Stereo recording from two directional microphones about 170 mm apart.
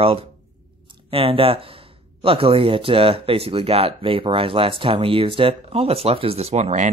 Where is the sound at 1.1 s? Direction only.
35° right (ahead or behind).